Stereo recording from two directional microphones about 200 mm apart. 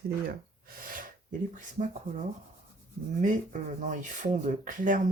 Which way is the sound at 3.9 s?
35° right (ahead or behind).